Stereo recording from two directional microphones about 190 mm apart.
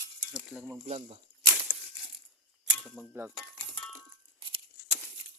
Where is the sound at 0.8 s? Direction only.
35° right (ahead or behind).